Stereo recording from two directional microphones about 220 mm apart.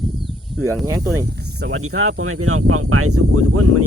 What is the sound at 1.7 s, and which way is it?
Speech, 70° right (ahead or behind).